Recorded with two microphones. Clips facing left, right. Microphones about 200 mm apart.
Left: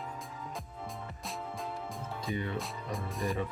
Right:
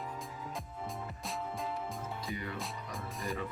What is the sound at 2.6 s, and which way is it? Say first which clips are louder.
Music: left 3 dB; centre (ahead or behind).